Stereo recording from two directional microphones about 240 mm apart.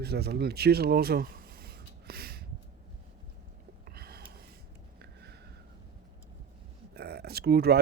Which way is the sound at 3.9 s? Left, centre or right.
Right.